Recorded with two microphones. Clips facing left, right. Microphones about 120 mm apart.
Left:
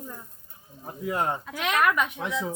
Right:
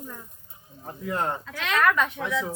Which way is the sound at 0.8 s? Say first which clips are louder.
Left 1 dB; 10° left (ahead or behind).